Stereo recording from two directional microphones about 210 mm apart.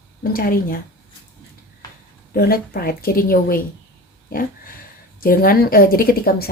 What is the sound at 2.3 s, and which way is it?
Speech, 45° left (ahead or behind).